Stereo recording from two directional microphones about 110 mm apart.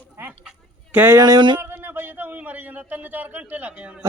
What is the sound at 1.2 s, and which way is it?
Speech, 40° right (ahead or behind).